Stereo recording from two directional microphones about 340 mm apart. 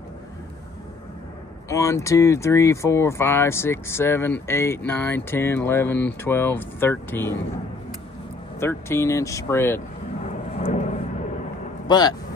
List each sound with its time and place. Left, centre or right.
1.7 s speech: centre
8.5 s speech: centre
10.2 s vehicle: centre
11.9 s speech: centre